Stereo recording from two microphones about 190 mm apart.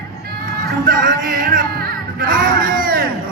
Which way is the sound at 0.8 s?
45° right (ahead or behind).